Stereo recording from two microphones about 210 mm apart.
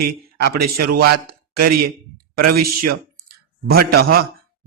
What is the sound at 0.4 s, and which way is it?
A man's voice, 45° right (ahead or behind).